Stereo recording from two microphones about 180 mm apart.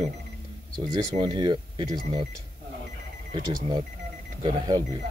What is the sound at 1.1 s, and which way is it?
Speech, 25° right (ahead or behind).